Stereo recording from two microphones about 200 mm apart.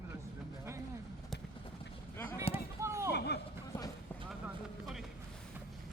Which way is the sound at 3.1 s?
55° left (ahead or behind).